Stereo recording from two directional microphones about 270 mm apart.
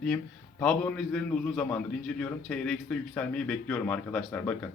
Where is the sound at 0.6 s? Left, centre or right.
Centre.